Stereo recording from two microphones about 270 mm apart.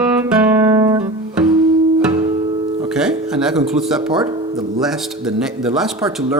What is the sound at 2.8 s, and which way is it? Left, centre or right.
Music, centre.